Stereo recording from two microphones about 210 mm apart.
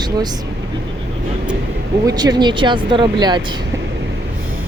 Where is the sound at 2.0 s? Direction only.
20° right (ahead or behind).